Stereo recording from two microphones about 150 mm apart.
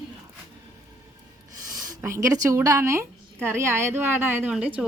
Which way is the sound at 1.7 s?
20° right (ahead or behind).